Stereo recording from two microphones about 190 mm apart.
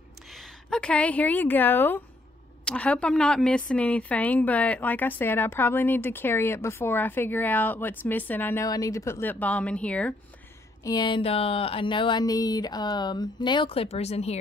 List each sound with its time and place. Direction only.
0.3 s a woman's voice: centre (ahead or behind)
10.8 s speech: 20° left (ahead or behind)